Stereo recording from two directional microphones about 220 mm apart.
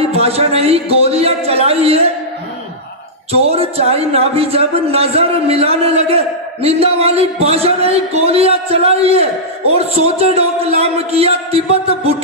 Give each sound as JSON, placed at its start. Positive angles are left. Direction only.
{"t": 0.1, "sound": "speech", "side_deg": -25}
{"t": 3.3, "sound": "speech", "side_deg": -25}